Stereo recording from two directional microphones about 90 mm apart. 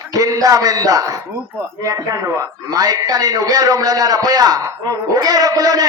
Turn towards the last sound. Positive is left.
turn(degrees=-45)  # may be behind; listen again after turning